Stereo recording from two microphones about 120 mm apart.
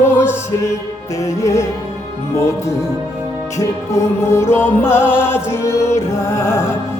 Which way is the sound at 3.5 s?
25° left (ahead or behind).